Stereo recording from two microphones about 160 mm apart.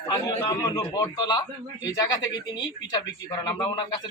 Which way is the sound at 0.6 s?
25° left (ahead or behind).